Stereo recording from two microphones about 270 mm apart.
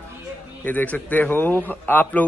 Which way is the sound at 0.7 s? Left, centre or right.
Centre.